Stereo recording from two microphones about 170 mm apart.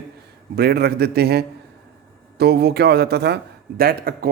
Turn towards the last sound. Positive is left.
turn(degrees=-60)  # may be behind; listen again after turning